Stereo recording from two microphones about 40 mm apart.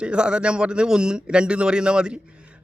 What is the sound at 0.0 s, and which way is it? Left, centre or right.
Speech, right.